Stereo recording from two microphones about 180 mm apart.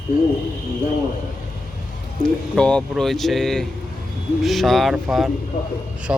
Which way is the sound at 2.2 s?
5° left (ahead or behind).